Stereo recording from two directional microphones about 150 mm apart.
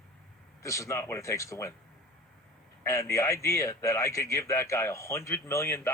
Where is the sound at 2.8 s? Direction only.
20° left (ahead or behind).